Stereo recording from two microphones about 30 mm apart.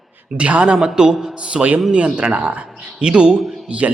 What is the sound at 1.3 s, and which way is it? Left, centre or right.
Speech, right.